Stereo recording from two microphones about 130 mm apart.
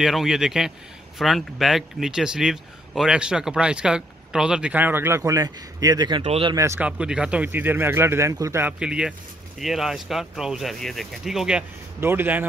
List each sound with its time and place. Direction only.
0.0 s a man's voice: 5° right (ahead or behind); by 6.2 s 35° right (ahead or behind)
6.2 s speech: 50° right (ahead or behind)
6.8 s speech: 5° right (ahead or behind)
8.7 s a man's voice: 5° right (ahead or behind)
12.0 s speech: 15° right (ahead or behind)